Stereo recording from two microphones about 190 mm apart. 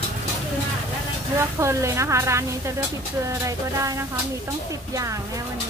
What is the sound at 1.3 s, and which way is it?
Speech, 15° right (ahead or behind).